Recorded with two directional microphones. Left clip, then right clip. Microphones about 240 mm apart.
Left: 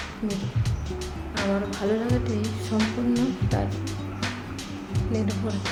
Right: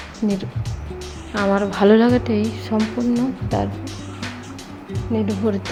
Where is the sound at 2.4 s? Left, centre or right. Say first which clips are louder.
Right 5 dB; centre.